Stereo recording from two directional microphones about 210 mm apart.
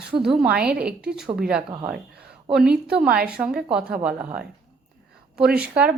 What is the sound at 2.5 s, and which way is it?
A woman's voice, 5° right (ahead or behind).